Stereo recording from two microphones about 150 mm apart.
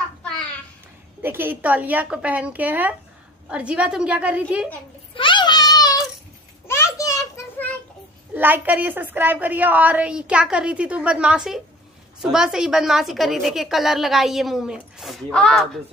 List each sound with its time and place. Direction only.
1.2 s a woman's voice: 15° right (ahead or behind)
5.1 s a sound: 35° left (ahead or behind)
8.4 s a woman's voice: 15° right (ahead or behind); by 15.8 s 5° left (ahead or behind)